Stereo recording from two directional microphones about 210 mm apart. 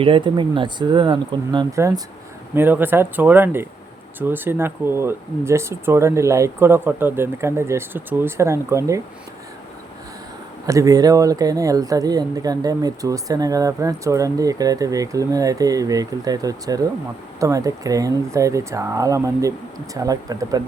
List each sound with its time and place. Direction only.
0.0 s speech: 25° right (ahead or behind)
10.7 s speech: 15° right (ahead or behind)